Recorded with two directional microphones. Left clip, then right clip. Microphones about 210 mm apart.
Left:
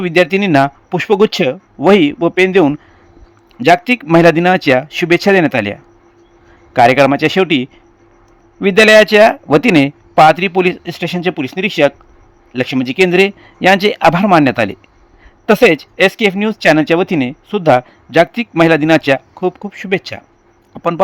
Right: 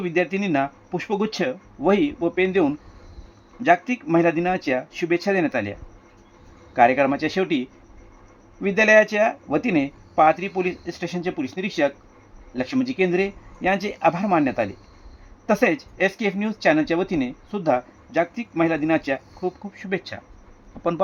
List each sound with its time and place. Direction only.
0.0 s speech: 35° left (ahead or behind)
6.7 s speech: 35° left (ahead or behind)